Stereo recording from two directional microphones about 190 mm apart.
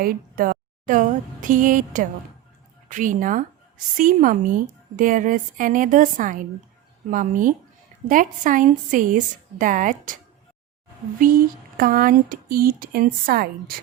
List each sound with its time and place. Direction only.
0.0 s a woman's voice: 50° right (ahead or behind)
11.2 s speech: 50° right (ahead or behind)